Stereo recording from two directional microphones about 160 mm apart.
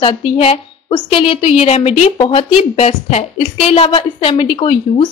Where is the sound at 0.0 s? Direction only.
35° left (ahead or behind).